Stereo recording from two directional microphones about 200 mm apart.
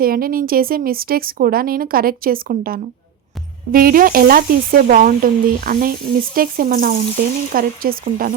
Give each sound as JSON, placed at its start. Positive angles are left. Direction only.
{"t": 0.0, "sound": "speech", "side_deg": -45}